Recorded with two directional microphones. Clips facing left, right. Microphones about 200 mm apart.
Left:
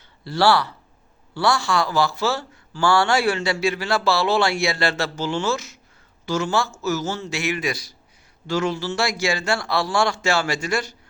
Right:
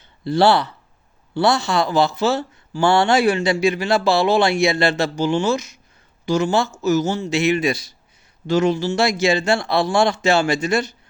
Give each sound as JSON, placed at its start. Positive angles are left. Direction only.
{"t": 0.3, "sound": "speech", "side_deg": -20}